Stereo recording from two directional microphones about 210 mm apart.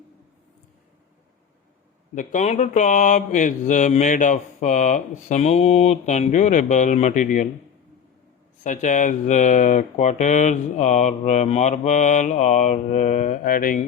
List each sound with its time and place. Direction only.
2.1 s mantra: 35° left (ahead or behind)
8.6 s mantra: 35° left (ahead or behind)